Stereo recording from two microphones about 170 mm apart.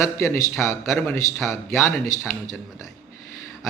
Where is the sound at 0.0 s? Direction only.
15° left (ahead or behind).